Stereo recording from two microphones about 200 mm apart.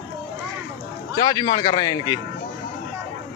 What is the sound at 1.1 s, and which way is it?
A man's voice, 20° left (ahead or behind).